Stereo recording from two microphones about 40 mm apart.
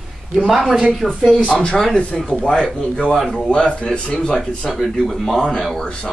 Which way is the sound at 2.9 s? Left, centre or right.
Left.